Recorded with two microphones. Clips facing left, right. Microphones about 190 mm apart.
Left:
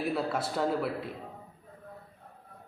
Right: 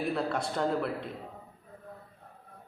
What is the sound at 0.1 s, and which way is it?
Speech, 5° left (ahead or behind).